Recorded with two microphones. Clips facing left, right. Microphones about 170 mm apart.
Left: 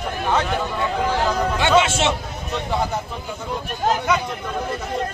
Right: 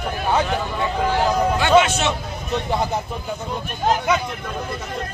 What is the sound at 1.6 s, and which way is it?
Speech, 25° left (ahead or behind).